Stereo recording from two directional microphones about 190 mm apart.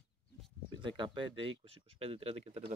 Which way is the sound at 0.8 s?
25° right (ahead or behind).